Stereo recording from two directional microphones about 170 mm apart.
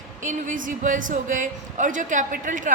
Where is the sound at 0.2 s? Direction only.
50° right (ahead or behind).